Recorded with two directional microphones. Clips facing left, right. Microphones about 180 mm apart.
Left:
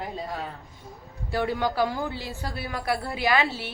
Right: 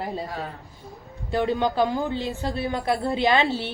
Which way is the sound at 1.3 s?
20° right (ahead or behind).